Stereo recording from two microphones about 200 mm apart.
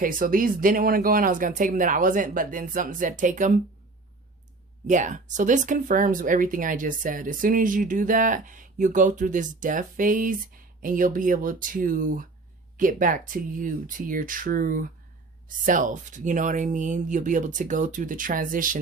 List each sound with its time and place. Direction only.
0.0 s speech: 45° right (ahead or behind)
4.9 s speech: 40° right (ahead or behind)